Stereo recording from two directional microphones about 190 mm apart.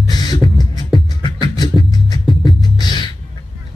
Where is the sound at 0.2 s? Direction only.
20° left (ahead or behind).